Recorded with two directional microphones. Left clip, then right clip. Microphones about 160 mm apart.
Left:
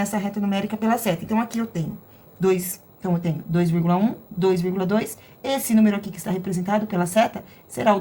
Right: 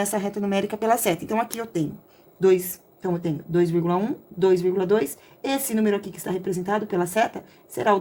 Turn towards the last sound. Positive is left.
turn(degrees=-25)  # may be behind; listen again after turning